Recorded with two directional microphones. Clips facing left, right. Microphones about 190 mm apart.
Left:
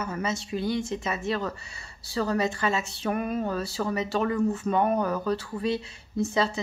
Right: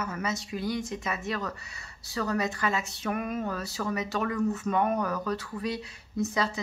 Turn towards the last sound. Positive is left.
turn(degrees=25)  # may be behind; listen again after turning